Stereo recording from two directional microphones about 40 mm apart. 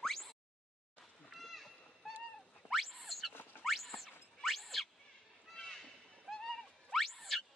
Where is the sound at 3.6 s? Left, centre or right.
Centre.